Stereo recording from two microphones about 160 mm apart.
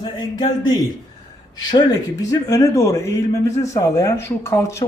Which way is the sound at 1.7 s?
25° left (ahead or behind).